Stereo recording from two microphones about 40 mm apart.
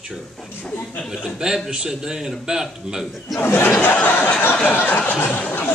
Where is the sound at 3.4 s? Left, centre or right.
Left.